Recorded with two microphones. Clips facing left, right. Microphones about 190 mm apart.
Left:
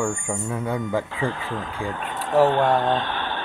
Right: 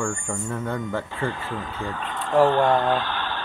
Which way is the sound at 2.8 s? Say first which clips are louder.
Even; 25° left (ahead or behind).